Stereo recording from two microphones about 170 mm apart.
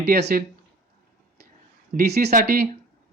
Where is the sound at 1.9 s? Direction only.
70° right (ahead or behind).